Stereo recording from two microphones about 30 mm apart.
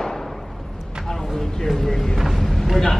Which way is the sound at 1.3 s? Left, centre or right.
Centre.